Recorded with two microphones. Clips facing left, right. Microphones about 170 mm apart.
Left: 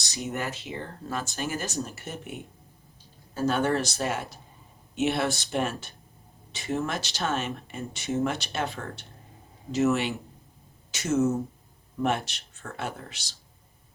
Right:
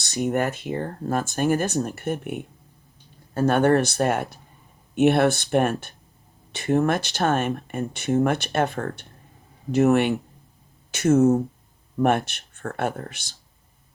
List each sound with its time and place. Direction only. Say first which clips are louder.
0.0 s speech: right 9 dB; 60° right (ahead or behind)